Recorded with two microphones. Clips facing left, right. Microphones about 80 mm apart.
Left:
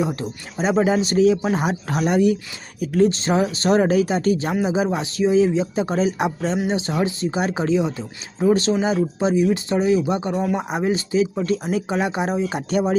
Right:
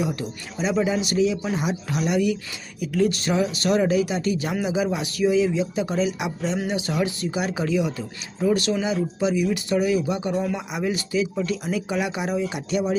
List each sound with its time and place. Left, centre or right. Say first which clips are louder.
0.0 s speech: left 3 dB; left
6.6 s speech: left 3 dB; left